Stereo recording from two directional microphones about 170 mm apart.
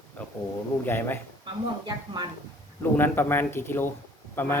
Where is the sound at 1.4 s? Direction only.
25° right (ahead or behind).